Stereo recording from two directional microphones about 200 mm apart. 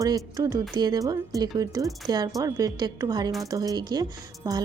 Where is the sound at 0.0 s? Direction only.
15° right (ahead or behind).